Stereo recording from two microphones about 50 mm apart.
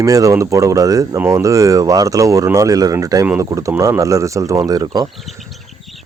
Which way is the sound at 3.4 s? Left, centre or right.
Right.